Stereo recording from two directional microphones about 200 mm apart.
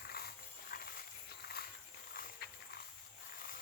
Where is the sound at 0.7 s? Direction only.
50° left (ahead or behind).